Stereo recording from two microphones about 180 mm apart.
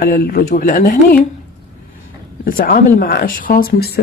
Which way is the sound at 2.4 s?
50° left (ahead or behind).